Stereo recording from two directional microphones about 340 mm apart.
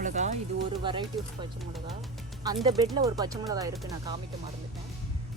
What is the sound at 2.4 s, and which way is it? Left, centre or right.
Speech, centre.